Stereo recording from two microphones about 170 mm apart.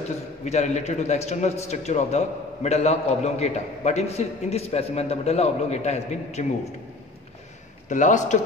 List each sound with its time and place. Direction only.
0.5 s a man's voice: 40° left (ahead or behind)
7.9 s a man's voice: 45° left (ahead or behind)